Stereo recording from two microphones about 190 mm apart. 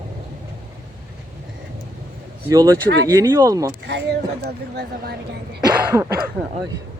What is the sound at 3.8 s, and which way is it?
A woman's voice, 65° right (ahead or behind).